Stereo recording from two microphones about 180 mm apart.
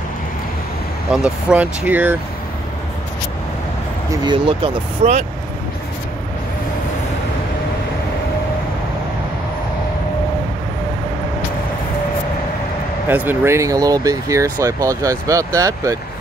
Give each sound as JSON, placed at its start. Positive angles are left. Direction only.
{"t": 1.1, "sound": "speech", "side_deg": -5}
{"t": 4.1, "sound": "speech", "side_deg": -25}
{"t": 13.1, "sound": "speech", "side_deg": -10}